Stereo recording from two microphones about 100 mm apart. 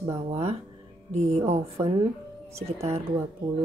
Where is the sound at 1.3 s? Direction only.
90° right.